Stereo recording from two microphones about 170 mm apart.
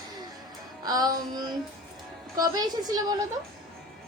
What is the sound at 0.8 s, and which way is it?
A woman's voice, 20° right (ahead or behind).